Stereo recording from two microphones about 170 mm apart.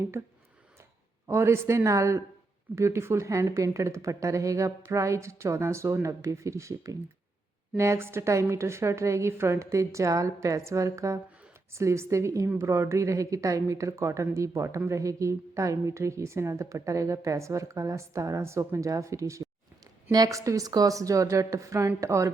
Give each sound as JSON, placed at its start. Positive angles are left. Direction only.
{"t": 0.1, "sound": "a woman's voice", "side_deg": -15}